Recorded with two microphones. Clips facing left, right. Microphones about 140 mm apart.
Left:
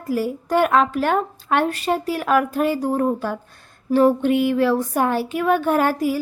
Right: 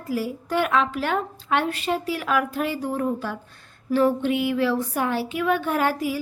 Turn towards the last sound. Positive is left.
turn(degrees=45)  # may be behind; listen again after turning